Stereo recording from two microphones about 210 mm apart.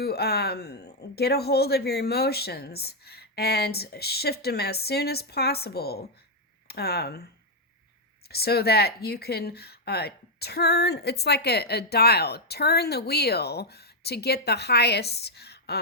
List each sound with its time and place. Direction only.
0.0 s speech: 50° left (ahead or behind)
8.3 s speech: 50° left (ahead or behind)